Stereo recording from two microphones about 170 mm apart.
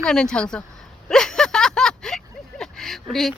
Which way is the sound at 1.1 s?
5° left (ahead or behind).